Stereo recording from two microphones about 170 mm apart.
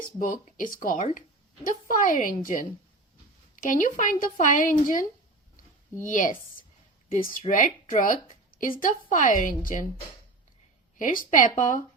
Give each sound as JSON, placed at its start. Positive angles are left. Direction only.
{"t": 0.2, "sound": "a woman's voice", "side_deg": 50}
{"t": 10.9, "sound": "a woman's voice", "side_deg": 55}